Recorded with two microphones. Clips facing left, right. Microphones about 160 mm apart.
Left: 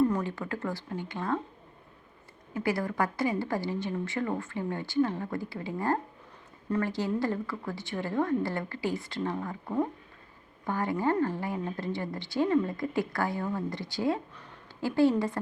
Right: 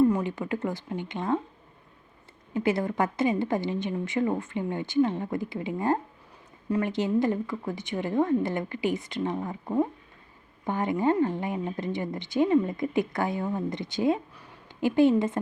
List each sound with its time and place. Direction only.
0.0 s speech: 15° right (ahead or behind)
2.5 s a woman's voice: 20° right (ahead or behind)